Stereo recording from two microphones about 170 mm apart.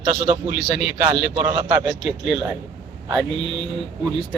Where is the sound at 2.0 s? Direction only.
Centre (ahead or behind).